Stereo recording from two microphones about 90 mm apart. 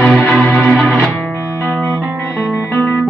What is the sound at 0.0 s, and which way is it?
Music, 15° left (ahead or behind).